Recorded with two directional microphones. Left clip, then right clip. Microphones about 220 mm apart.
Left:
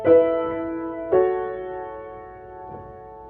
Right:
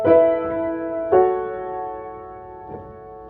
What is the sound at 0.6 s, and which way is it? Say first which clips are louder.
Music: right 4 dB; 35° right (ahead or behind).